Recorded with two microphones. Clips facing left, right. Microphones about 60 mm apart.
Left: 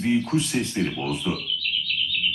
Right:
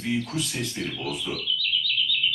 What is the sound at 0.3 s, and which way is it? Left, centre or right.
Speech, left.